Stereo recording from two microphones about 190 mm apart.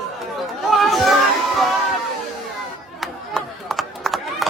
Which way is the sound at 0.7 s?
Centre (ahead or behind).